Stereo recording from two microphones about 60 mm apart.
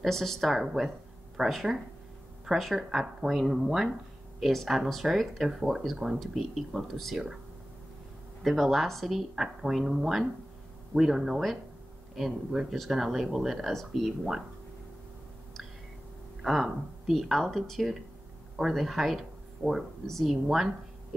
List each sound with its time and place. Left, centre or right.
0.0 s speech: centre
8.4 s speech: centre
16.4 s speech: centre